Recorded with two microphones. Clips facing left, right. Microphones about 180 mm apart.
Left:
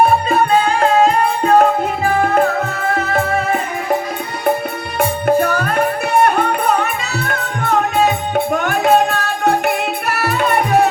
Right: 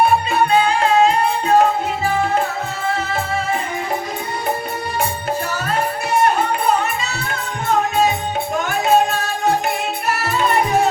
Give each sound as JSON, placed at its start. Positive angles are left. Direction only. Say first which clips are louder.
{"t": 0.0, "sound": "music", "louder": "left 2 dB", "side_deg": 45}
{"t": 5.2, "sound": "music", "louder": "left 8 dB", "side_deg": 60}
{"t": 8.5, "sound": "music", "louder": "left 1 dB", "side_deg": 60}